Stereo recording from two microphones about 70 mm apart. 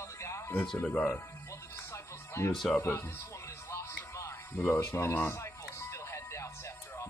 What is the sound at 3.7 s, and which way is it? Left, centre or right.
Music, left.